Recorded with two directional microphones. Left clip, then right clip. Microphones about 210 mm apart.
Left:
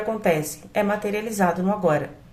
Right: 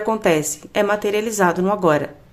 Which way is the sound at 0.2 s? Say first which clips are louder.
Right 4 dB; 40° right (ahead or behind).